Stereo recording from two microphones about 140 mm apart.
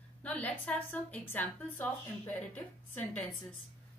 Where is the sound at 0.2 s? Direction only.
10° left (ahead or behind).